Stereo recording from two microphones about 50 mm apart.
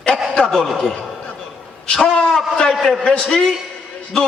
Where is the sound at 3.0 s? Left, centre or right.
Centre.